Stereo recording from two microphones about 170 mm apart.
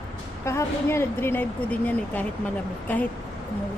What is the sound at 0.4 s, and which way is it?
Speech, 15° left (ahead or behind).